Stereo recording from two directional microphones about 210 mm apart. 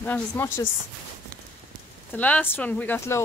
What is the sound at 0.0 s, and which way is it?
Speech, 10° left (ahead or behind).